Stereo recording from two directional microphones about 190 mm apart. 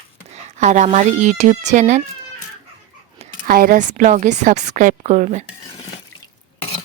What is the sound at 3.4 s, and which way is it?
Speech, 50° right (ahead or behind).